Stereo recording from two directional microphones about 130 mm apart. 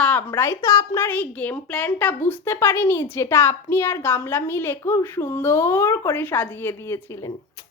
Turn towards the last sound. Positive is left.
turn(degrees=15)  # may be behind; listen again after turning